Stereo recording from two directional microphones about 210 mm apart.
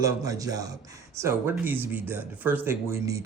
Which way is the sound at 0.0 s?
15° right (ahead or behind).